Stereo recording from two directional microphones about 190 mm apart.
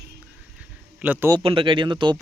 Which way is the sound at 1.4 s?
30° right (ahead or behind).